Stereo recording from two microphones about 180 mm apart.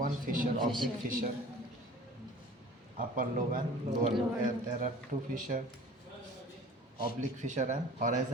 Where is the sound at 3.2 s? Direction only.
50° right (ahead or behind).